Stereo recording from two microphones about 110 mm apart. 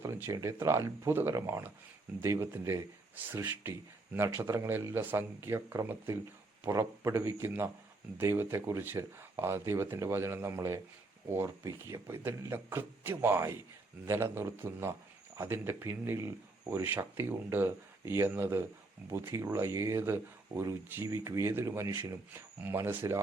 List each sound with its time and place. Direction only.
0.0 s speech: 25° right (ahead or behind)